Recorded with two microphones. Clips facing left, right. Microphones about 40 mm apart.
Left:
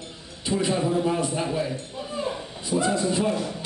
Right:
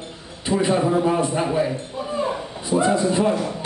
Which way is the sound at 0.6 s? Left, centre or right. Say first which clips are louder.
Right 5 dB; right.